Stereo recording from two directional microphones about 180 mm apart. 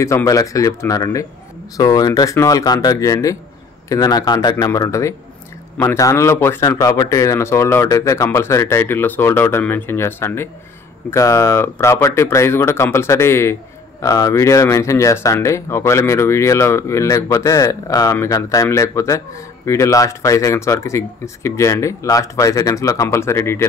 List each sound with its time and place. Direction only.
0.0 s speech: 15° left (ahead or behind)